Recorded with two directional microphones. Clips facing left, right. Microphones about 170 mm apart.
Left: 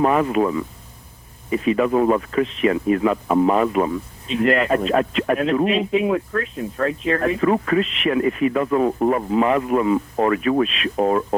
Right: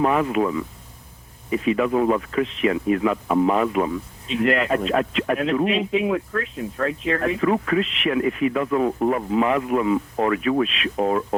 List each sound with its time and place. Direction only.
0.0 s speech: 40° left (ahead or behind)